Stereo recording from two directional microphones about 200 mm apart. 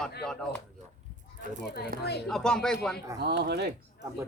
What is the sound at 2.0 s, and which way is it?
Speech, 55° left (ahead or behind).